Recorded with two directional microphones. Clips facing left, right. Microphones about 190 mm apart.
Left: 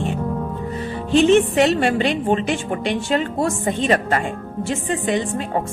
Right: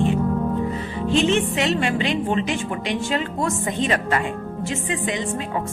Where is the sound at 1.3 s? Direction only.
45° left (ahead or behind).